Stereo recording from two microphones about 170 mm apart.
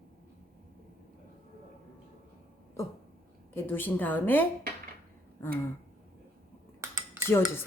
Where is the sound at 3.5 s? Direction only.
10° left (ahead or behind).